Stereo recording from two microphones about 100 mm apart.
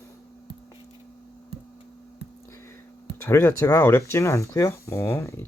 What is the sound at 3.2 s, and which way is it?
Speech, 30° left (ahead or behind).